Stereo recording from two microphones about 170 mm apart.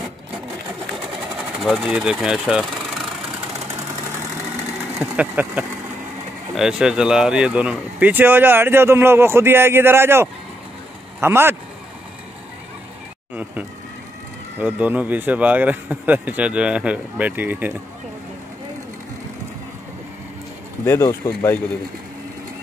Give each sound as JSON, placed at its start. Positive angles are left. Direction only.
{"t": 1.6, "sound": "speech", "side_deg": -5}
{"t": 5.1, "sound": "speech", "side_deg": -10}
{"t": 13.3, "sound": "vehicle", "side_deg": -10}
{"t": 14.6, "sound": "speech", "side_deg": -10}
{"t": 20.8, "sound": "speech", "side_deg": 15}